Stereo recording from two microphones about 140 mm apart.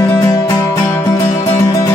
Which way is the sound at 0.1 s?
20° left (ahead or behind).